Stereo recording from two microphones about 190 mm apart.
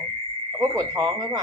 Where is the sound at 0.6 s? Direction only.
20° right (ahead or behind).